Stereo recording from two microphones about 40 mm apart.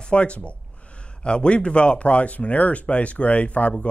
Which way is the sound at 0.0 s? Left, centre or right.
Left.